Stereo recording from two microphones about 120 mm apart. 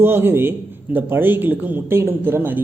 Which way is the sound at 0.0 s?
20° right (ahead or behind).